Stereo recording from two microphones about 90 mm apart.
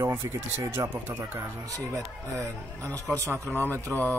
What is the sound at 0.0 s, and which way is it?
Speech, 30° right (ahead or behind).